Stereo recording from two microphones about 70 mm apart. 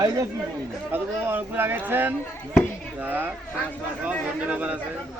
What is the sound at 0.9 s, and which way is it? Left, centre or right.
A man's voice, right.